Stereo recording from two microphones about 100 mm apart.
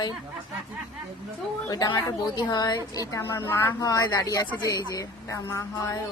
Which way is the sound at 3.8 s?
35° left (ahead or behind).